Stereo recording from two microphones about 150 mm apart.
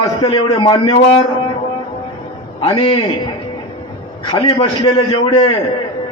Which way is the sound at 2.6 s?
40° left (ahead or behind).